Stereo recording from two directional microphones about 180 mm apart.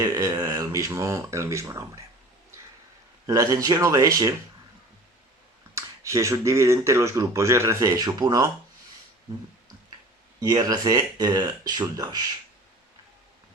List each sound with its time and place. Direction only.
0.0 s a sound: 20° right (ahead or behind)
3.2 s speech: 20° right (ahead or behind)
5.7 s speech: 15° right (ahead or behind)
10.4 s speech: 20° right (ahead or behind)